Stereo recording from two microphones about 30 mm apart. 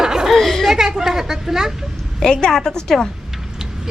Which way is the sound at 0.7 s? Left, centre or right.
Centre.